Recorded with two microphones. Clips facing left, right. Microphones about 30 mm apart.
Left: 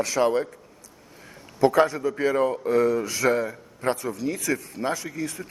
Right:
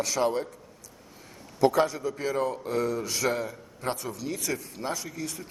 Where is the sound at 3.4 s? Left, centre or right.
Left.